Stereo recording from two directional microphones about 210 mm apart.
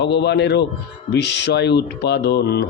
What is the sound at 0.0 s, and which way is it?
Speech, 55° left (ahead or behind).